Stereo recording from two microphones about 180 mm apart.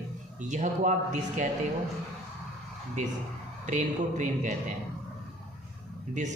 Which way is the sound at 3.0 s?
40° right (ahead or behind).